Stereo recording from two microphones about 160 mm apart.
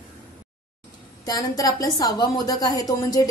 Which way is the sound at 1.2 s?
20° left (ahead or behind).